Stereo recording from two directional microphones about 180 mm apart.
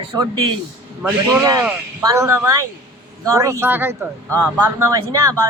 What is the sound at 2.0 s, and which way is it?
Speech, 15° right (ahead or behind).